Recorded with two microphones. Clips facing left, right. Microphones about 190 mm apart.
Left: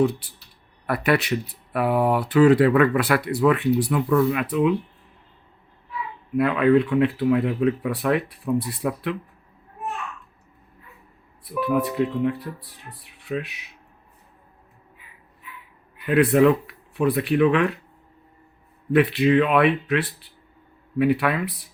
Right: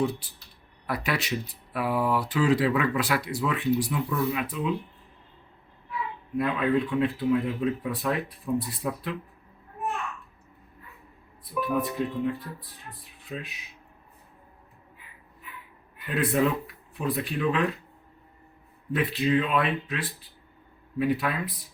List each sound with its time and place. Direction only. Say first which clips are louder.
0.9 s speech: left 8 dB; 60° left (ahead or behind)
6.3 s speech: left 7 dB; 65° left (ahead or behind)
11.4 s speech: left 5 dB; 70° left (ahead or behind)
16.0 s speech: left 8 dB; 65° left (ahead or behind)
18.9 s speech: left 7 dB; 70° left (ahead or behind)